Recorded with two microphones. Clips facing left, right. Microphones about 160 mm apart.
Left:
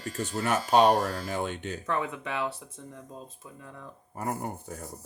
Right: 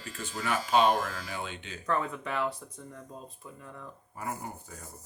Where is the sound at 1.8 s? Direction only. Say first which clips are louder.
Right 2 dB; 15° left (ahead or behind).